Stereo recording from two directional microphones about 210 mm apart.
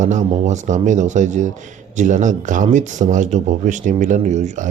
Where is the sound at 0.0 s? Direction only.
35° right (ahead or behind).